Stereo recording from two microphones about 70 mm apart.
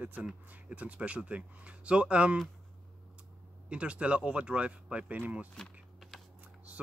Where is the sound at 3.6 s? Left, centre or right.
Centre.